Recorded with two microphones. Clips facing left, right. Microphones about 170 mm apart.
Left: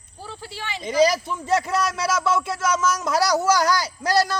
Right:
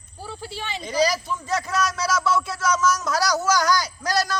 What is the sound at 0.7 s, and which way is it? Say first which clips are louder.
A man's voice: left 4 dB; 20° left (ahead or behind).